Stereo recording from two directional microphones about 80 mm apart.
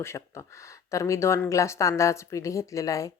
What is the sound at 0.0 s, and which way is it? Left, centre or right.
Speech, left.